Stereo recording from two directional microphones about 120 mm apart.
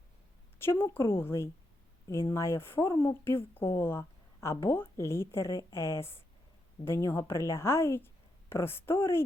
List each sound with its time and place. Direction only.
0.6 s speech: 20° left (ahead or behind)